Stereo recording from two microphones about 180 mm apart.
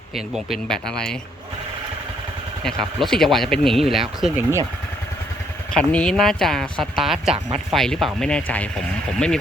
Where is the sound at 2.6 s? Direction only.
Centre (ahead or behind).